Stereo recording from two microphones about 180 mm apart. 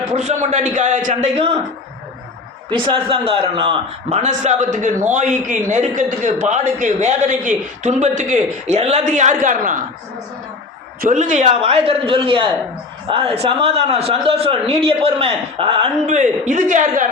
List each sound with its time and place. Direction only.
0.1 s a man's voice: 40° right (ahead or behind)
2.6 s a man's voice: 25° right (ahead or behind); by 9.7 s 45° right (ahead or behind)
11.0 s a man's voice: 45° right (ahead or behind); by 15.9 s 30° right (ahead or behind)
16.0 s a man's voice: 45° right (ahead or behind)